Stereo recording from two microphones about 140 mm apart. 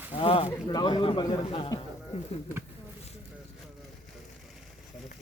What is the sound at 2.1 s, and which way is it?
Speech, 50° left (ahead or behind).